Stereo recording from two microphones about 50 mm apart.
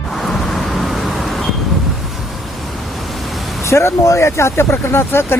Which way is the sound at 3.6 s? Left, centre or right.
Left.